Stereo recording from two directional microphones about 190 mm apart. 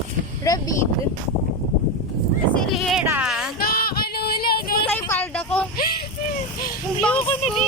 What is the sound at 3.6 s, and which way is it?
Music, 50° left (ahead or behind).